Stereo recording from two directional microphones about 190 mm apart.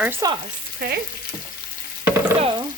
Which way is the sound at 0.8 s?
55° right (ahead or behind).